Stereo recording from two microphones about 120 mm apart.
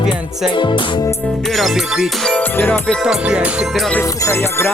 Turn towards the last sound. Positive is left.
turn(degrees=20)  # may be behind; listen again after turning